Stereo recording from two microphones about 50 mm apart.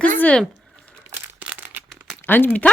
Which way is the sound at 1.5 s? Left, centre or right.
Right.